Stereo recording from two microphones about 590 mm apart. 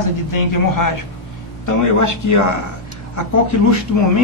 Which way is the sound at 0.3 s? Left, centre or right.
Left.